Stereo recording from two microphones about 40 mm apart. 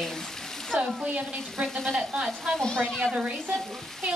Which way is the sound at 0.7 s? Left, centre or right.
Right.